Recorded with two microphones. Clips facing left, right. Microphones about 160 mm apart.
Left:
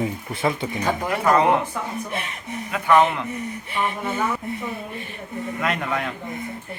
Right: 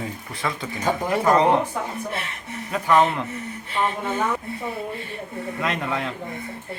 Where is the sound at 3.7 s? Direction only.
10° left (ahead or behind).